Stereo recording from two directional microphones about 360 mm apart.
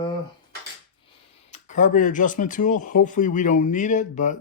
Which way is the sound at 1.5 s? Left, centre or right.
Left.